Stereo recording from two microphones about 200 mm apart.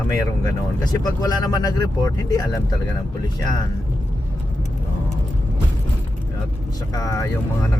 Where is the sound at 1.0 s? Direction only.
20° left (ahead or behind).